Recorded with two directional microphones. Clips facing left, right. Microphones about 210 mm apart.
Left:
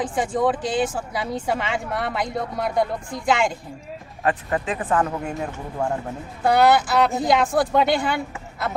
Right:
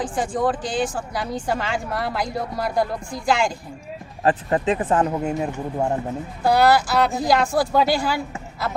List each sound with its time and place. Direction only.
0.0 s speech: centre (ahead or behind)
4.2 s speech: 30° right (ahead or behind)
6.4 s speech: centre (ahead or behind)